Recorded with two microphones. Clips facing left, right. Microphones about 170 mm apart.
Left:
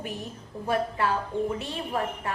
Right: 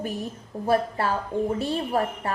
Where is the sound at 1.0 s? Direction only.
35° right (ahead or behind).